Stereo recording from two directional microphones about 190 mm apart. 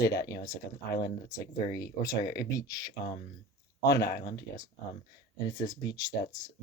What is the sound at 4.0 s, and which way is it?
Speech, 55° left (ahead or behind).